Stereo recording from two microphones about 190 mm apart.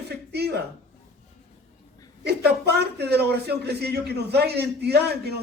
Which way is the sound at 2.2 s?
60° right (ahead or behind).